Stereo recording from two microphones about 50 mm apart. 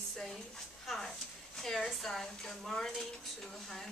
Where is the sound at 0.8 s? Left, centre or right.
Centre.